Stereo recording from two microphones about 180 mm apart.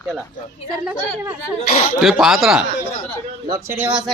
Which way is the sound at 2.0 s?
Centre (ahead or behind).